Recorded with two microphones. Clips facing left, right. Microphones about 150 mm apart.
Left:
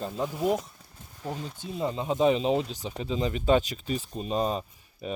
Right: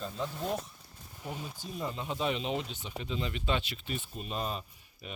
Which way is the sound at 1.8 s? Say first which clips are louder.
Left 9 dB; 30° left (ahead or behind).